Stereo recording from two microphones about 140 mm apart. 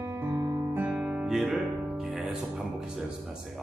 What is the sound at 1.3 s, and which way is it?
Music, 5° right (ahead or behind).